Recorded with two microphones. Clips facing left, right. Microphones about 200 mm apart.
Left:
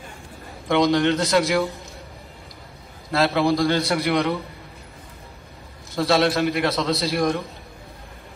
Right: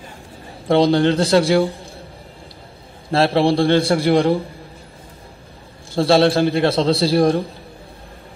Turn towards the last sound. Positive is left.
turn(degrees=-30)  # may be behind; listen again after turning